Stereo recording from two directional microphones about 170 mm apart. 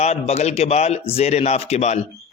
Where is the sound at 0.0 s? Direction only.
40° left (ahead or behind).